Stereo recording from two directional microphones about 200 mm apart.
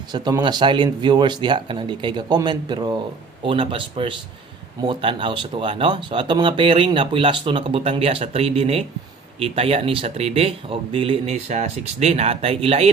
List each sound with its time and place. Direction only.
0.1 s speech: 20° right (ahead or behind)